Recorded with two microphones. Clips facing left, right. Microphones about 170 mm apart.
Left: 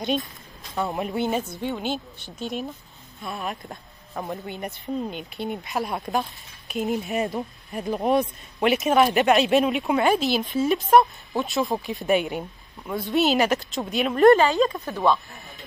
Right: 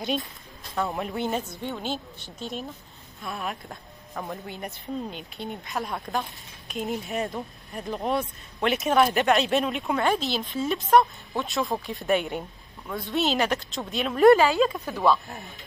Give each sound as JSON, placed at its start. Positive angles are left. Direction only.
{"t": 0.0, "sound": "speech", "side_deg": 0}
{"t": 0.7, "sound": "speech", "side_deg": 15}
{"t": 1.2, "sound": "speech", "side_deg": 5}
{"t": 5.9, "sound": "speech", "side_deg": 20}
{"t": 6.7, "sound": "speech", "side_deg": 5}
{"t": 7.3, "sound": "speech", "side_deg": 15}
{"t": 8.6, "sound": "speech", "side_deg": 0}